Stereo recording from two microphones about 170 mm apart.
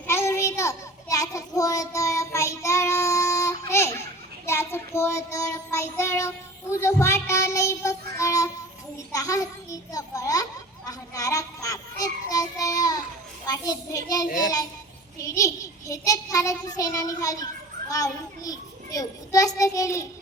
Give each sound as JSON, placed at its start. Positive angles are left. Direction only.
{"t": 0.1, "sound": "child singing", "side_deg": 15}
{"t": 3.7, "sound": "a sound", "side_deg": 15}
{"t": 4.4, "sound": "child singing", "side_deg": 15}
{"t": 14.3, "sound": "a child's voice", "side_deg": 50}
{"t": 15.2, "sound": "child singing", "side_deg": 20}